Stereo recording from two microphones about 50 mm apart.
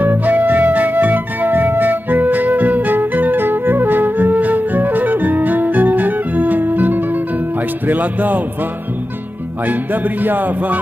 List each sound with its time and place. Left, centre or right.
0.0 s flute: right
9.7 s music: right